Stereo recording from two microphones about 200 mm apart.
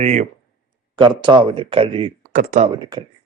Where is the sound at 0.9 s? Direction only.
25° right (ahead or behind).